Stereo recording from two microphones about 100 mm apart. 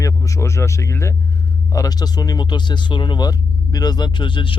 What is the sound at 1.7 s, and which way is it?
Speech, 40° left (ahead or behind).